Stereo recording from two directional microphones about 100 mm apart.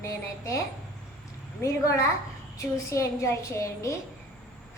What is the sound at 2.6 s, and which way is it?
A woman's voice, 30° left (ahead or behind).